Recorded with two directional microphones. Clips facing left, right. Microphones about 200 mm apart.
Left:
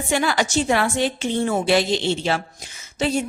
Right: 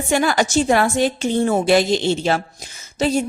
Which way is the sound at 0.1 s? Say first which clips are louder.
Right 3 dB; 45° right (ahead or behind).